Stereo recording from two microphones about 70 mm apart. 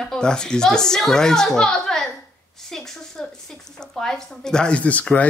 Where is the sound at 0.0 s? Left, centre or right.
Centre.